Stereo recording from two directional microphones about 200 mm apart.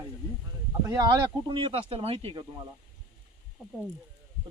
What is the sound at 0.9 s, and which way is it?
Speech, 20° right (ahead or behind).